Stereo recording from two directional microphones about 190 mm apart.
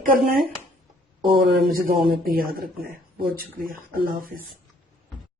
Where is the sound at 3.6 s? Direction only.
45° right (ahead or behind).